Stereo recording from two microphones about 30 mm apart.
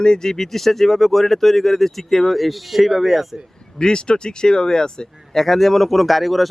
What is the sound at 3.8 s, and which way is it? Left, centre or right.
Speech, left.